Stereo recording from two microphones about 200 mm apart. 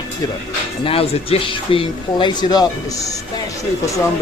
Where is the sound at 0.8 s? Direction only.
30° left (ahead or behind).